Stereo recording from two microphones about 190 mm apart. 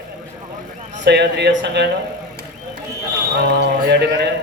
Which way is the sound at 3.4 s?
60° right (ahead or behind).